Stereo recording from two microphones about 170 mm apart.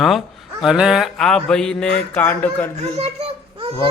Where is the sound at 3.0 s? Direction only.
35° right (ahead or behind).